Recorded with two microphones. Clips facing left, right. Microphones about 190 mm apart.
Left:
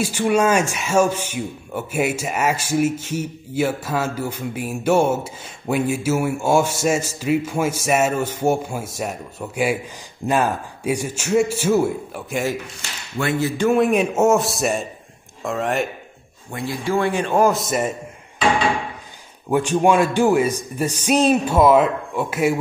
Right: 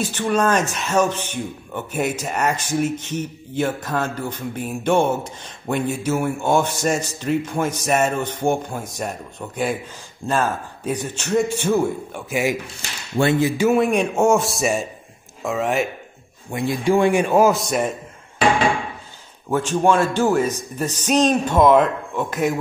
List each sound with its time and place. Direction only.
0.0 s speech: 10° left (ahead or behind)
13.2 s a sound: 25° right (ahead or behind)
13.5 s a man's voice: 5° right (ahead or behind)
16.4 s a man's voice: 15° right (ahead or behind); by 17.9 s 5° left (ahead or behind)
19.5 s speech: 15° left (ahead or behind)